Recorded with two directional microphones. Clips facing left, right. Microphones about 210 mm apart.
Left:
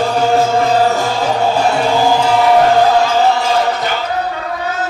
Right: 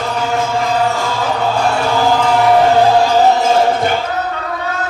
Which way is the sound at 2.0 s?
10° left (ahead or behind).